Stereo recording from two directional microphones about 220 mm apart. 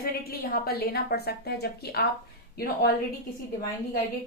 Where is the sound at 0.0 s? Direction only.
40° left (ahead or behind).